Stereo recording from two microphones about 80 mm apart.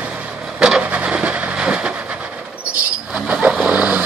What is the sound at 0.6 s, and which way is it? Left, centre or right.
Vehicle, centre.